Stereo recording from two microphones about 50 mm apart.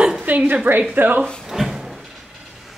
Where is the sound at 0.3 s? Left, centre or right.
Right.